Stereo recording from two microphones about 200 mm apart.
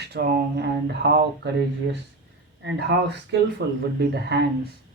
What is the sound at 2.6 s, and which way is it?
Speech, 60° right (ahead or behind).